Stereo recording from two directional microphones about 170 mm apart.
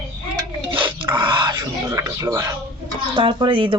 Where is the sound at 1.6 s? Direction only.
15° right (ahead or behind).